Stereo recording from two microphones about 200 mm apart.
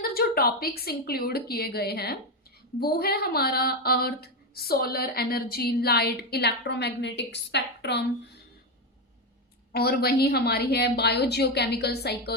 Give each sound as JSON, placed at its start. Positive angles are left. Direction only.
{"t": 0.0, "sound": "a woman's voice", "side_deg": 50}
{"t": 9.7, "sound": "speech", "side_deg": 50}